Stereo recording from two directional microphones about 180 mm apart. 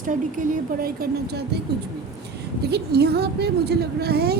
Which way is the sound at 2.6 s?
65° right (ahead or behind).